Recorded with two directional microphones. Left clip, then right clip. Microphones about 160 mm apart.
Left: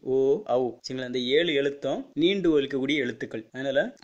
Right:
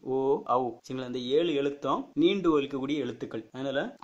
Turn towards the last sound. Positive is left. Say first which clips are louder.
# left 5 dB
turn(degrees=30)  # may be behind; listen again after turning